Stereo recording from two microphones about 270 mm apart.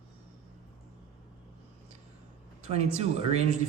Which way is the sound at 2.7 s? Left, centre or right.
Right.